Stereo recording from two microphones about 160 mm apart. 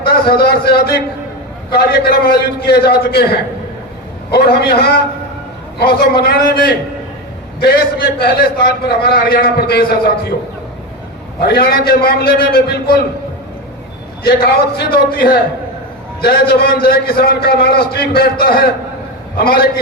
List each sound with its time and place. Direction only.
0.0 s a man's voice: 75° left (ahead or behind)
8.2 s a man's voice: 70° left (ahead or behind)
11.3 s a man's voice: 75° left (ahead or behind)
14.3 s a man's voice: 70° left (ahead or behind)